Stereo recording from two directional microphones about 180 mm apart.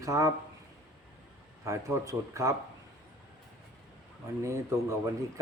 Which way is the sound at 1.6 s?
15° right (ahead or behind).